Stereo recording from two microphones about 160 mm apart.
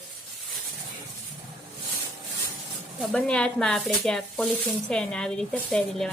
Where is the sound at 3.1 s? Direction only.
5° left (ahead or behind).